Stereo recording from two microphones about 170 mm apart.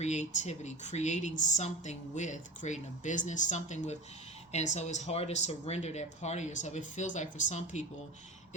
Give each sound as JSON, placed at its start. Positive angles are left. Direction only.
{"t": 0.0, "sound": "speech", "side_deg": 40}